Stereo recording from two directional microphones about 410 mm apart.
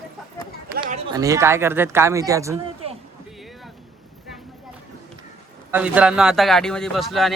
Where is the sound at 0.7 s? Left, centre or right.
Centre.